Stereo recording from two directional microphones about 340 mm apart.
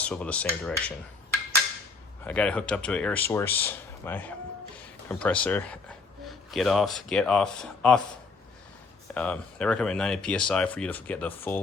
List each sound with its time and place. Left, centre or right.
0.0 s speech: centre
2.2 s speech: centre
9.1 s speech: centre